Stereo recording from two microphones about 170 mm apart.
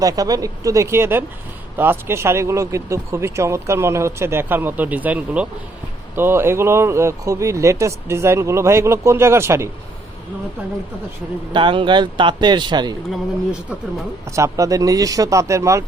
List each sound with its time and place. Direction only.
0.0 s speech: 20° right (ahead or behind)
11.5 s speech: 30° right (ahead or behind)
13.1 s speech: 5° right (ahead or behind)
14.3 s speech: 15° right (ahead or behind)